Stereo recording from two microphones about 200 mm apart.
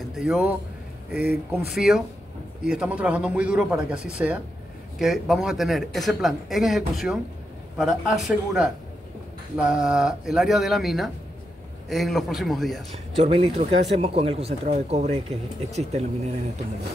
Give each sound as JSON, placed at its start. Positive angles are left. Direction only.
{"t": 0.1, "sound": "speech", "side_deg": -5}
{"t": 1.7, "sound": "speech", "side_deg": 0}
{"t": 12.9, "sound": "speech", "side_deg": -30}